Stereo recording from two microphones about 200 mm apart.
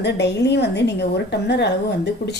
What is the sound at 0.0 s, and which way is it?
A woman's voice, 60° left (ahead or behind).